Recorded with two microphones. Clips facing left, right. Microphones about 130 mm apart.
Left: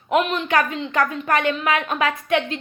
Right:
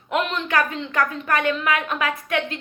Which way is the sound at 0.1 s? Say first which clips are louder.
Left 3 dB; 20° left (ahead or behind).